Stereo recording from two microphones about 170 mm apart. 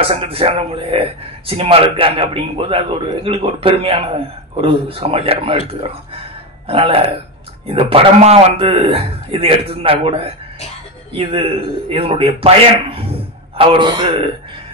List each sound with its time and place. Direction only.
0.0 s a man's voice: 35° right (ahead or behind)